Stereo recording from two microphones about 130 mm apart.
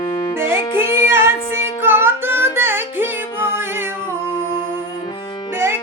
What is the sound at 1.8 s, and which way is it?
Music, 15° right (ahead or behind).